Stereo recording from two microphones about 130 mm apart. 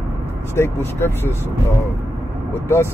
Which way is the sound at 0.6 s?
20° left (ahead or behind).